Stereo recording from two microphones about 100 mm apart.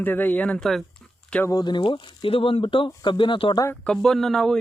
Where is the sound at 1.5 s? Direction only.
50° left (ahead or behind).